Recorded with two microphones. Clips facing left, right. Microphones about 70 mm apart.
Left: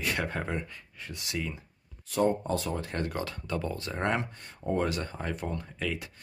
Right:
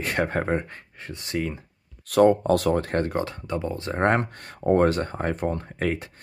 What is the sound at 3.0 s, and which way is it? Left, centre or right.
Speech, right.